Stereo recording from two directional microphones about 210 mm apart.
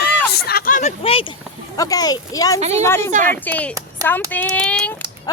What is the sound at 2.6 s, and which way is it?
Speech, 30° right (ahead or behind).